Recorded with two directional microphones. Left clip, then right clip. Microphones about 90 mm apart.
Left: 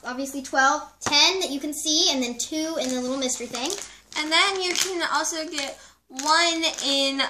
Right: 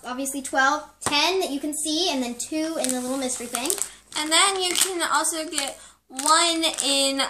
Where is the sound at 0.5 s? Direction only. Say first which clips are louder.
Left 1 dB; centre (ahead or behind).